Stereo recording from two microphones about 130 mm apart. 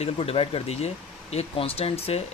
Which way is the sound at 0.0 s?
50° left (ahead or behind).